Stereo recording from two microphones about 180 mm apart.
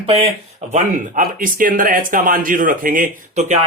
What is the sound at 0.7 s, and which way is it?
Speech, 45° right (ahead or behind).